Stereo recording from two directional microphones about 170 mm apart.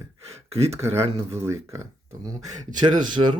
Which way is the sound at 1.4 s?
15° right (ahead or behind).